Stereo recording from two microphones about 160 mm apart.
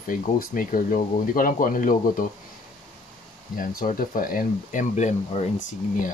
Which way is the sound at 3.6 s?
60° left (ahead or behind).